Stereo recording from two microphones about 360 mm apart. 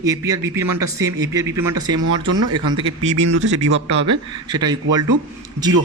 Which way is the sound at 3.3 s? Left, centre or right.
Right.